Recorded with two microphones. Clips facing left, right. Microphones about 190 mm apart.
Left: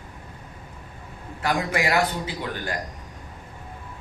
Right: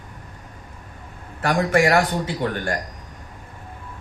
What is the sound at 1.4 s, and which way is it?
Speech, 50° right (ahead or behind).